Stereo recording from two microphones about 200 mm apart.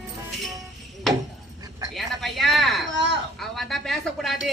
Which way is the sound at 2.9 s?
65° right (ahead or behind).